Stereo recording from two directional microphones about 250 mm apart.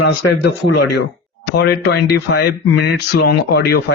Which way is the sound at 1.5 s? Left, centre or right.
Left.